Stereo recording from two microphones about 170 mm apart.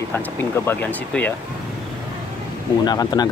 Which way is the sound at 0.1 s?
10° left (ahead or behind).